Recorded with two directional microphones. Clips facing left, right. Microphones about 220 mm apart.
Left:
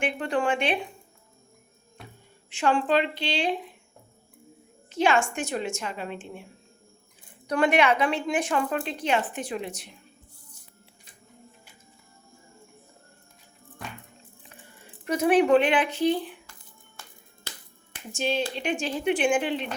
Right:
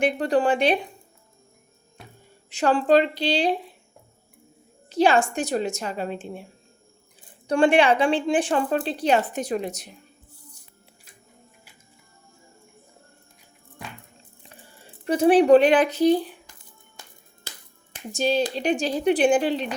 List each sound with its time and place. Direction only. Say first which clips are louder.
0.0 s a woman's voice: right 5 dB; 40° right (ahead or behind)
2.5 s a woman's voice: right 5 dB; 40° right (ahead or behind)
4.9 s a woman's voice: right 4 dB; 35° right (ahead or behind)
7.4 s a woman's voice: right 4 dB; 30° right (ahead or behind)
14.5 s speech: right 2 dB; 30° right (ahead or behind)
18.1 s a woman's voice: right 5 dB; 40° right (ahead or behind)